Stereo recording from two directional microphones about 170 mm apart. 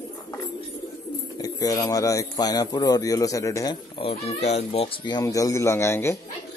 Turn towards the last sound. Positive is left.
turn(degrees=15)  # may be behind; listen again after turning